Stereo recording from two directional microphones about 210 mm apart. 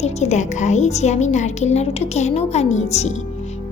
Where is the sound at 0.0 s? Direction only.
30° left (ahead or behind).